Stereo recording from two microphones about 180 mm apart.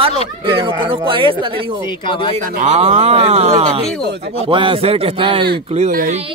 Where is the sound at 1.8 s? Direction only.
25° left (ahead or behind).